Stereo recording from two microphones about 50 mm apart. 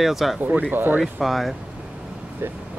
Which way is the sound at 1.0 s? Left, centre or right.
Centre.